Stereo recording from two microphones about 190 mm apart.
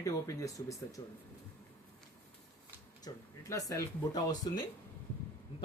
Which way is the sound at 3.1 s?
20° left (ahead or behind).